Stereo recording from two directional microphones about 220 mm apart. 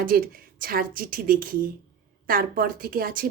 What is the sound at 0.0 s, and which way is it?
A woman's voice, 40° right (ahead or behind).